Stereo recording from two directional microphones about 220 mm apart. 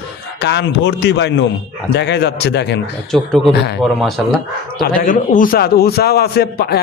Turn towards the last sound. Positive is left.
turn(degrees=45)  # may be behind; listen again after turning